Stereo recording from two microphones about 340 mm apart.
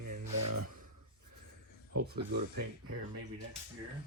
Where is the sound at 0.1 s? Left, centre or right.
Right.